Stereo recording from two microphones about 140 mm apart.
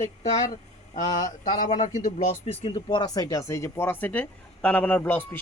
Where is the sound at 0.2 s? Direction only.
55° left (ahead or behind).